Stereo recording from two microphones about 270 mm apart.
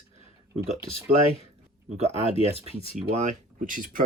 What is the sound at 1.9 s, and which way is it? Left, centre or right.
Speech, right.